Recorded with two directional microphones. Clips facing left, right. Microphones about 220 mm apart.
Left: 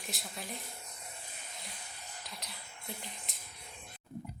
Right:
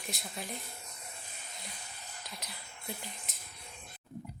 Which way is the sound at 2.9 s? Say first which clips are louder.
Right 3 dB; centre (ahead or behind).